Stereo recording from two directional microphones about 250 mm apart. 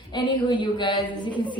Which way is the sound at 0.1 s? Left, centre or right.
Centre.